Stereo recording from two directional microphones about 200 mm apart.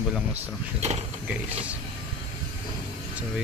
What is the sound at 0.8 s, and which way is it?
Speech, 30° right (ahead or behind).